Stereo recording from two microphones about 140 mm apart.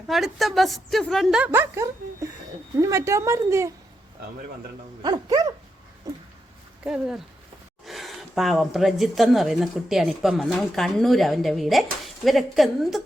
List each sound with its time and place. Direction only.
0.1 s speech: centre (ahead or behind)
1.5 s speech: 20° right (ahead or behind)
5.0 s speech: 30° right (ahead or behind)
6.8 s speech: 5° right (ahead or behind)